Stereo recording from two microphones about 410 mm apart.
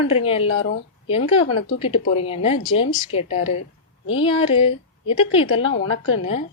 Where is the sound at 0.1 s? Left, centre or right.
Centre.